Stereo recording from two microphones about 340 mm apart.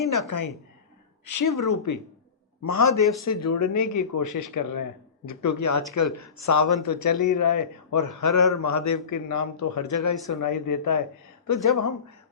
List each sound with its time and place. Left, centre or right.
0.3 s a man's voice: left
4.5 s speech: left
5.3 s a man's voice: left